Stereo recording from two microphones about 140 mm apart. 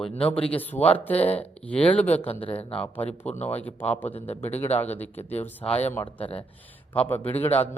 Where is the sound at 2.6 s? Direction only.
45° left (ahead or behind).